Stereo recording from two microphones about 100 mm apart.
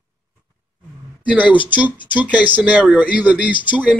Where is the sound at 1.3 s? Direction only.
15° right (ahead or behind).